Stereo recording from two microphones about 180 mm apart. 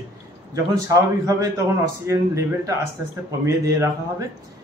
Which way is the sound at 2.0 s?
15° right (ahead or behind).